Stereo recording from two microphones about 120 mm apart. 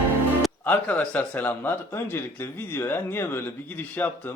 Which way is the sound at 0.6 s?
15° left (ahead or behind).